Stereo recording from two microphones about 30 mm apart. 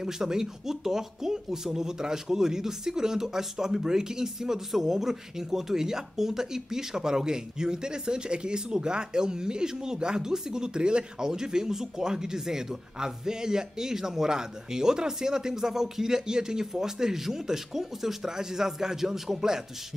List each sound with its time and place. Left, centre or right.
0.0 s a man's voice: centre